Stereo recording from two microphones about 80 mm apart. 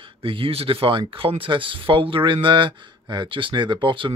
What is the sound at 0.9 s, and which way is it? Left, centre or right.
Speech, right.